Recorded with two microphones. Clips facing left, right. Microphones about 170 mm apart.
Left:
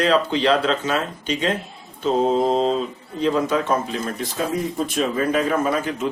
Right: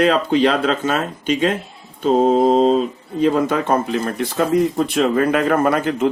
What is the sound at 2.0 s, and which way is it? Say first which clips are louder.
Speech: right 4 dB; 45° right (ahead or behind).